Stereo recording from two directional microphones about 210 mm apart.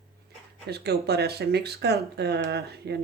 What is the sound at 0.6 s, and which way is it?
Speech, 50° right (ahead or behind).